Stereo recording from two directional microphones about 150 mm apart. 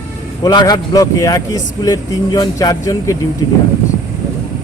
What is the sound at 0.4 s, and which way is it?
Speech, 25° left (ahead or behind).